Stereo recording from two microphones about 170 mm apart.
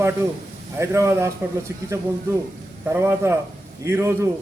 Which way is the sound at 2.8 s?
15° right (ahead or behind).